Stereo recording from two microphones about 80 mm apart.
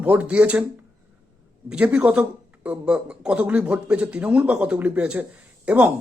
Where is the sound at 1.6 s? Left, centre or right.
Centre.